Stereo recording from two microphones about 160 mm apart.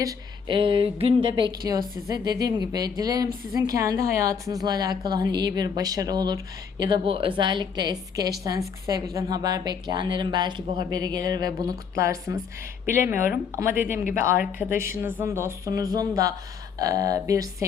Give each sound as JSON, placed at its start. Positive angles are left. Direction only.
{"t": 0.0, "sound": "a woman's voice", "side_deg": -30}
{"t": 13.6, "sound": "a woman's voice", "side_deg": -15}